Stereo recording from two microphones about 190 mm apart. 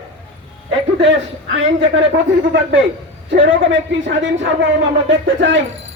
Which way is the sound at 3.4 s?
75° right (ahead or behind).